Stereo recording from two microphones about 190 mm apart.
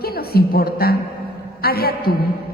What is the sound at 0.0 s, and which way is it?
A woman's voice, 55° left (ahead or behind).